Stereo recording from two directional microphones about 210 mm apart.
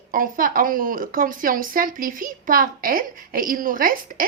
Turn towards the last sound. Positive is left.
turn(degrees=-45)  # may be behind; listen again after turning